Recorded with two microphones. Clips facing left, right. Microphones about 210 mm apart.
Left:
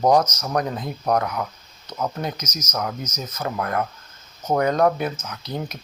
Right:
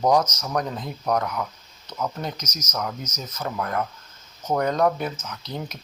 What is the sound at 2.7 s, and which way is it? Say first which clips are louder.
Speech: left 2 dB; 50° left (ahead or behind).